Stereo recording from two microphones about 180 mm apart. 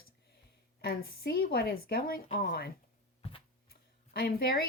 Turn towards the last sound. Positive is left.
turn(degrees=55)  # may be behind; listen again after turning